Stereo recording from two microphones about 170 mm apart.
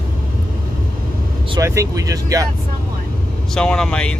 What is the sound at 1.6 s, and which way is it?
Speech, 15° right (ahead or behind).